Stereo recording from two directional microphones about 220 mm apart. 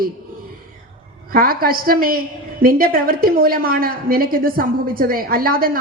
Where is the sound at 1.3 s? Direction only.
40° right (ahead or behind).